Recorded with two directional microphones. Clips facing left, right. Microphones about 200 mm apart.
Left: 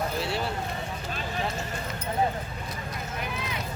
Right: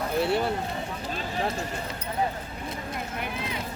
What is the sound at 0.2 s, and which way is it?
Speech, 55° right (ahead or behind).